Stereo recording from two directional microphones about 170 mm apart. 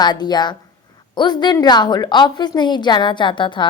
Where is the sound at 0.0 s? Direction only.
25° left (ahead or behind).